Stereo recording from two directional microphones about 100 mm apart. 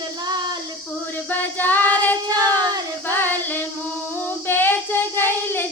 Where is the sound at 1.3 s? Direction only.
20° left (ahead or behind).